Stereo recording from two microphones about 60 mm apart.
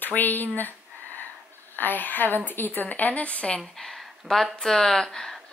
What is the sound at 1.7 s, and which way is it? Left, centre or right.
A woman's voice, left.